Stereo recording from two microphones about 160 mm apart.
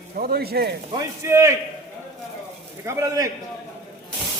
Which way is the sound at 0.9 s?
15° right (ahead or behind).